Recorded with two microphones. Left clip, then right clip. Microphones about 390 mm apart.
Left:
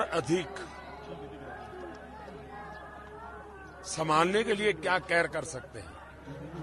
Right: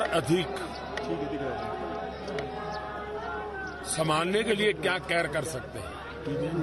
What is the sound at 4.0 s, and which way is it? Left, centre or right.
A man's voice, left.